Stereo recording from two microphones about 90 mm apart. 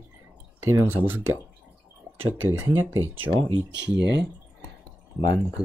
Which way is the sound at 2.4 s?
25° right (ahead or behind).